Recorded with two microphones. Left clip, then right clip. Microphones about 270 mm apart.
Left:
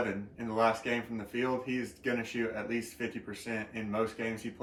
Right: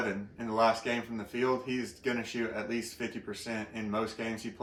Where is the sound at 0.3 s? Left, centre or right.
Centre.